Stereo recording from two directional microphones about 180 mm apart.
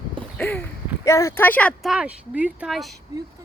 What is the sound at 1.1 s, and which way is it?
Speech, 15° left (ahead or behind).